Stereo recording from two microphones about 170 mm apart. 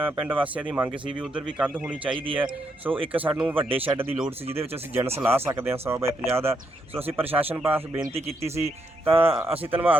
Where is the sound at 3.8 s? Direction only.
10° right (ahead or behind).